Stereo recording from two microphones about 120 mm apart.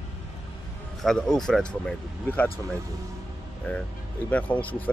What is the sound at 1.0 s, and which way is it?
Speech, 5° left (ahead or behind).